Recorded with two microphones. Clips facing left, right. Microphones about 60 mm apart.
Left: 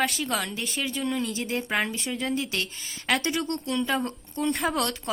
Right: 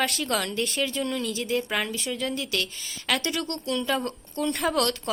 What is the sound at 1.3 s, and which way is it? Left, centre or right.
A woman's voice, left.